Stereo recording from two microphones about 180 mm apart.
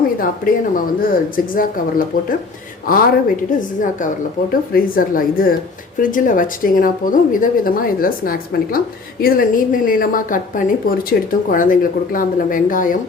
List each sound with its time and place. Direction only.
0.2 s a woman's voice: 50° left (ahead or behind)